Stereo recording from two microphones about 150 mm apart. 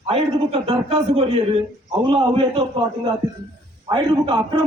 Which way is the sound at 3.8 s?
30° right (ahead or behind).